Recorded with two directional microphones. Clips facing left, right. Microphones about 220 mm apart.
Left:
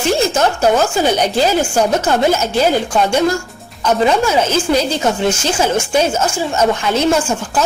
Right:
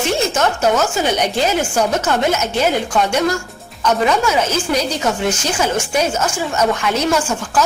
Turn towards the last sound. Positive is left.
turn(degrees=30)  # may be behind; listen again after turning